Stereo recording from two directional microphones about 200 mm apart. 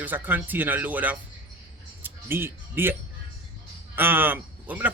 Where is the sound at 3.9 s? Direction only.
10° right (ahead or behind).